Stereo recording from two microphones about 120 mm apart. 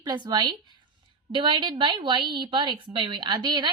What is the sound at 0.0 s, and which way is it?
A woman's voice, 40° right (ahead or behind).